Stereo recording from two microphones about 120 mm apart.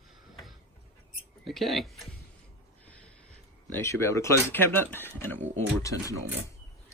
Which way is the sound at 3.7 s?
25° left (ahead or behind).